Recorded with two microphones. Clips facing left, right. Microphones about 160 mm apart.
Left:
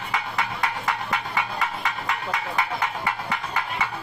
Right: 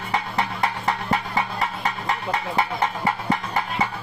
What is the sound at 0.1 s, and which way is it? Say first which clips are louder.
Music: right 3 dB; 35° right (ahead or behind).